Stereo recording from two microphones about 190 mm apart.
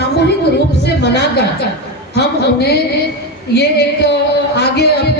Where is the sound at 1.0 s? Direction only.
60° left (ahead or behind).